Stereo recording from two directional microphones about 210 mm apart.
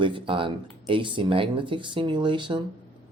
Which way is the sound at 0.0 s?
25° right (ahead or behind).